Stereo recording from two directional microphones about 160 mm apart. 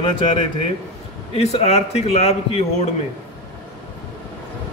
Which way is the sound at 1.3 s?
40° left (ahead or behind).